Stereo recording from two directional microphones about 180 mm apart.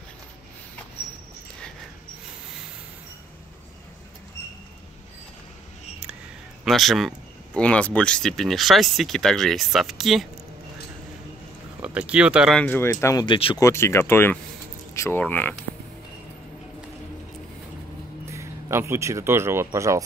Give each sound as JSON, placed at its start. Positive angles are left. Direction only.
{"t": 6.6, "sound": "speech", "side_deg": 0}
{"t": 11.8, "sound": "speech", "side_deg": -5}
{"t": 13.2, "sound": "speech", "side_deg": 30}
{"t": 13.6, "sound": "speech", "side_deg": 15}
{"t": 18.2, "sound": "speech", "side_deg": -15}